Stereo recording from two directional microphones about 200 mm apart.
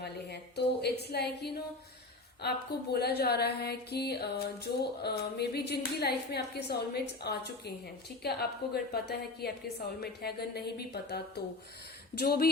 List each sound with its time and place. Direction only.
0.0 s music: 55° left (ahead or behind)
2.4 s a woman's voice: 50° left (ahead or behind)
2.9 s music: 55° left (ahead or behind)
8.2 s a woman's voice: 55° left (ahead or behind)